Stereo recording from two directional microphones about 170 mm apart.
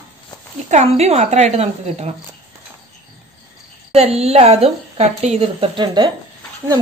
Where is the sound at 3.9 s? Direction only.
35° right (ahead or behind).